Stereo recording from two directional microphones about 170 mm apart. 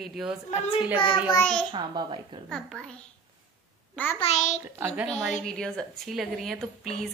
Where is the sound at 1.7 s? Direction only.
25° right (ahead or behind).